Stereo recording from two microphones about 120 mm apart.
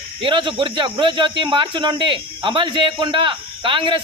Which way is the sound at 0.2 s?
45° right (ahead or behind).